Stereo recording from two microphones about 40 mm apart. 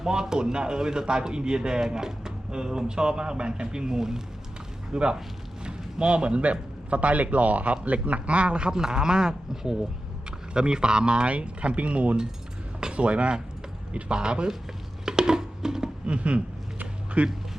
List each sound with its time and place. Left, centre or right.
0.0 s a man's voice: centre
8.7 s a man's voice: centre
15.0 s a sound: centre
16.0 s a man's voice: right